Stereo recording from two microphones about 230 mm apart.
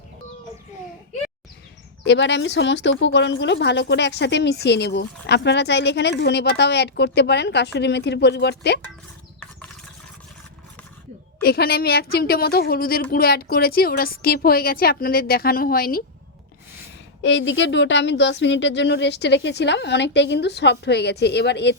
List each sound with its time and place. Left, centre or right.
2.0 s speech: left
11.4 s a woman's voice: left
17.2 s speech: left